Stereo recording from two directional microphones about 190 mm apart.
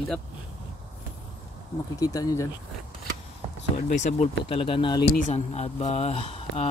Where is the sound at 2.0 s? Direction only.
20° left (ahead or behind).